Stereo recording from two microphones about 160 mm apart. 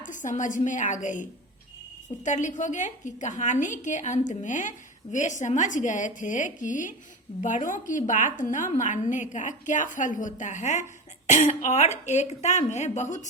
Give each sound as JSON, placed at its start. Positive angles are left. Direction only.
{"t": 0.0, "sound": "a woman's voice", "side_deg": 50}